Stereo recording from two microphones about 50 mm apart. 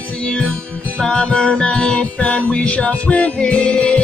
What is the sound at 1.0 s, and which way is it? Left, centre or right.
Music, centre.